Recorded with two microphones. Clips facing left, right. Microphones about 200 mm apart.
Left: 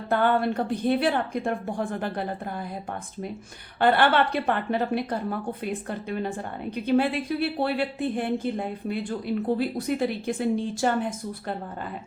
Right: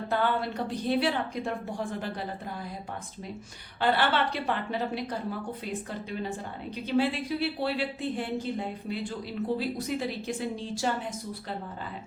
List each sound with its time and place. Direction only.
0.1 s a woman's voice: 55° left (ahead or behind)
3.8 s a woman's voice: 55° left (ahead or behind)